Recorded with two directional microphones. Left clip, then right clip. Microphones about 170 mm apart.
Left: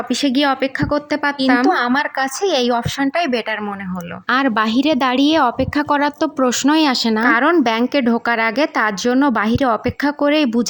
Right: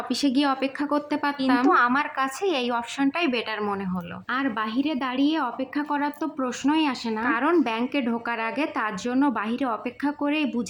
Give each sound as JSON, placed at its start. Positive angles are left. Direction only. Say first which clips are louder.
{"t": 0.1, "sound": "a woman's voice", "louder": "left 7 dB", "side_deg": 35}
{"t": 4.3, "sound": "a woman's voice", "louder": "left 11 dB", "side_deg": 90}